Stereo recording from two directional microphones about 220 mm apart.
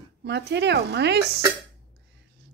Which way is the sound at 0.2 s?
50° right (ahead or behind).